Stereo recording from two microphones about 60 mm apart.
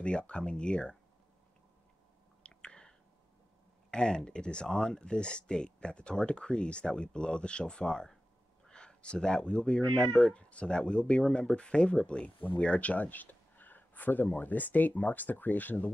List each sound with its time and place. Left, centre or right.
0.0 s speech: centre
2.4 s whispering: centre
3.9 s speech: centre
12.4 s speech: left